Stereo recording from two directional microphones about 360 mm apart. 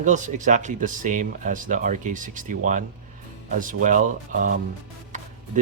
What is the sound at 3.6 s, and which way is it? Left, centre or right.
Speech, right.